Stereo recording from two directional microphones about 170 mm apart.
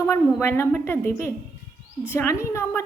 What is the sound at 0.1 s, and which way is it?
A woman's voice, 15° left (ahead or behind).